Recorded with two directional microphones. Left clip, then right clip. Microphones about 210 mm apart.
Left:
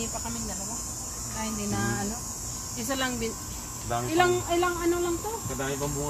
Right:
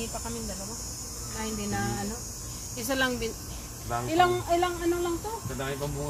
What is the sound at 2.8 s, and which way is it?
Speech, 45° right (ahead or behind).